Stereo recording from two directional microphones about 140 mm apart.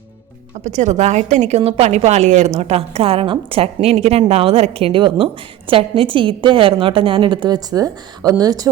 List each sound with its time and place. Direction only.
0.6 s a woman's voice: 60° right (ahead or behind); by 8.7 s 25° right (ahead or behind)